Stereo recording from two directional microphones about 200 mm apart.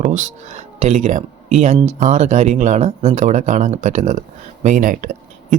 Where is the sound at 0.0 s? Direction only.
35° right (ahead or behind).